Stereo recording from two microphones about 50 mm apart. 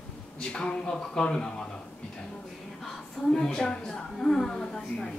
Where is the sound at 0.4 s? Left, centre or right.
Centre.